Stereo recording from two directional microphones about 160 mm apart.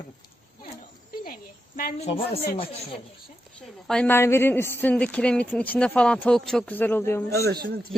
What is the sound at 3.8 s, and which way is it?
A woman's voice, 5° left (ahead or behind).